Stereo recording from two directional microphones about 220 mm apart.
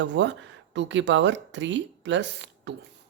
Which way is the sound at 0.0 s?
55° right (ahead or behind).